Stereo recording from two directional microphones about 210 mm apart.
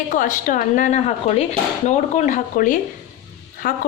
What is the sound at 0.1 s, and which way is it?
Speech, 40° left (ahead or behind).